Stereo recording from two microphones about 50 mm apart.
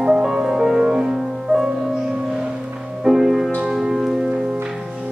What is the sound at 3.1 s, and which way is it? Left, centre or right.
Music, centre.